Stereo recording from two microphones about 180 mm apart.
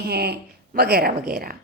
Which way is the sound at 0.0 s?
60° right (ahead or behind).